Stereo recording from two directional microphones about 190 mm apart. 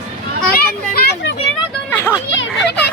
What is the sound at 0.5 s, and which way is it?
Children playing, 55° left (ahead or behind).